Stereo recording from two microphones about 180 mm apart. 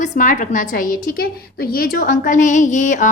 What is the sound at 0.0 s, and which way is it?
A woman's voice, 45° left (ahead or behind).